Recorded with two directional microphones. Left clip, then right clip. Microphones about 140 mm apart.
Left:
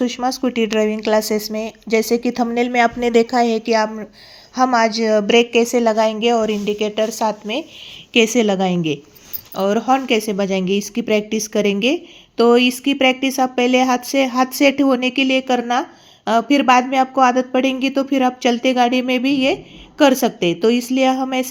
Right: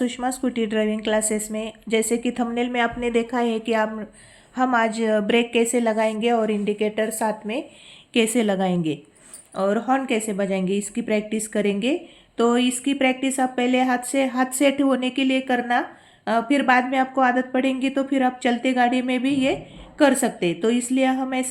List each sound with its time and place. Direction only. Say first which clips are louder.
0.0 s a woman's voice: left 5 dB; 25° left (ahead or behind)
8.1 s a woman's voice: left 6 dB; 25° left (ahead or behind)